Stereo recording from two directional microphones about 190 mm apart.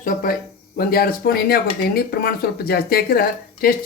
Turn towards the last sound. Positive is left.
turn(degrees=50)  # may be behind; listen again after turning